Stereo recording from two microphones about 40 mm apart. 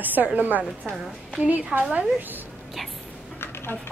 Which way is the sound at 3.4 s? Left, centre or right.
Left.